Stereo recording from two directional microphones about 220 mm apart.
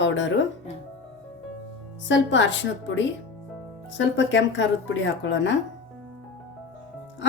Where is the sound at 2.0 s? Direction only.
55° left (ahead or behind).